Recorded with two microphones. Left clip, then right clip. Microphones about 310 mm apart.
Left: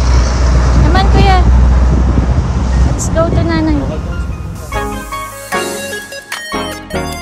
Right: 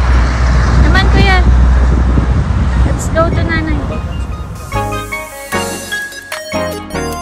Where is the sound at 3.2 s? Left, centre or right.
Centre.